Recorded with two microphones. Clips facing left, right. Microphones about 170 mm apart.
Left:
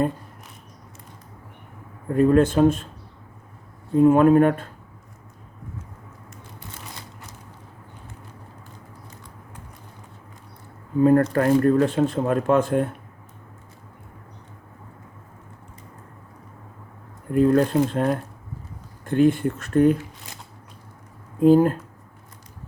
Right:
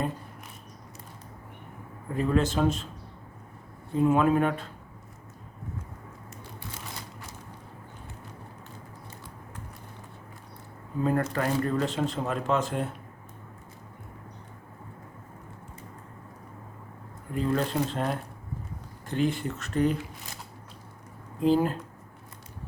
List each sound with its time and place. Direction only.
2.0 s speech: 50° left (ahead or behind)
3.9 s speech: 50° left (ahead or behind)
11.0 s speech: 50° left (ahead or behind)
17.3 s speech: 55° left (ahead or behind)
21.4 s speech: 50° left (ahead or behind)